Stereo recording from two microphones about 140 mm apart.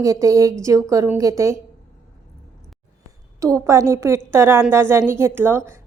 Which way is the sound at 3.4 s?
20° right (ahead or behind).